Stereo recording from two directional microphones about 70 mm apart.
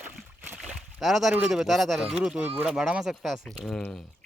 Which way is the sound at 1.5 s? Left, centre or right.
Centre.